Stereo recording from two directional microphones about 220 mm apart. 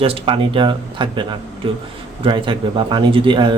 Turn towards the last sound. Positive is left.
turn(degrees=-20)  # may be behind; listen again after turning